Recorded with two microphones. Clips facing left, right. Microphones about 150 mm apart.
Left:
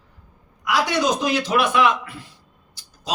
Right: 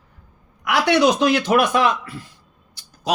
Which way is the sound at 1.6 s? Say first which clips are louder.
Right 1 dB; 40° right (ahead or behind).